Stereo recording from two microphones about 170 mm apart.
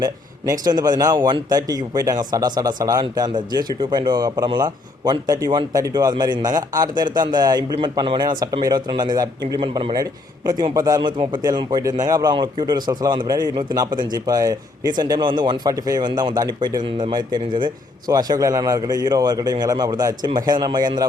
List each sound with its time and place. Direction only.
0.6 s speech: 25° right (ahead or behind)